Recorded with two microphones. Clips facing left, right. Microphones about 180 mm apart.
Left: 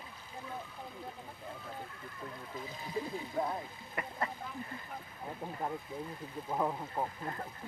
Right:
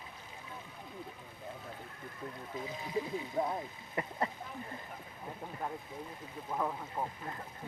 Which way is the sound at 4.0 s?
25° right (ahead or behind).